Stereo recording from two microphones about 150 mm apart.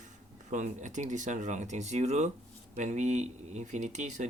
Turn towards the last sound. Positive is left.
turn(degrees=-50)  # may be behind; listen again after turning